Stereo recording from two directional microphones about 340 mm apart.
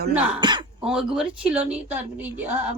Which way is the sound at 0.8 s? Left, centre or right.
Centre.